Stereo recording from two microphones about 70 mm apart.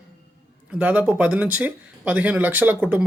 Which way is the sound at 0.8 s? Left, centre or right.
Right.